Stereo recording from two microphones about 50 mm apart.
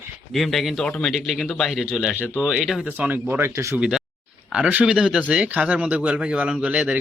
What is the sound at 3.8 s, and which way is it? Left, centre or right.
Speech, centre.